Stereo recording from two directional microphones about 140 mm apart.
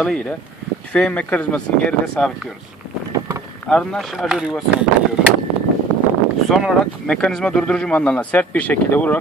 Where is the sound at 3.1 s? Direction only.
20° right (ahead or behind).